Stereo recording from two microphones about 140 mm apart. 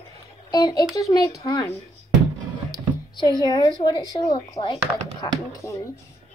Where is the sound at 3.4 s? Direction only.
30° left (ahead or behind).